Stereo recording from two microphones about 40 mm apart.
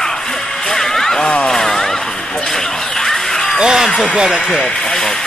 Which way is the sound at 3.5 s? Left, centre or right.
Centre.